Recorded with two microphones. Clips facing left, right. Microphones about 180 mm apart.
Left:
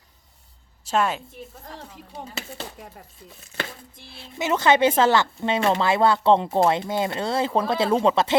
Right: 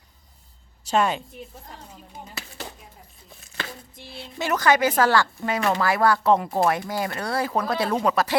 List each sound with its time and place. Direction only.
0.9 s speech: centre (ahead or behind)
3.9 s speech: centre (ahead or behind)
4.4 s a woman's voice: 20° left (ahead or behind)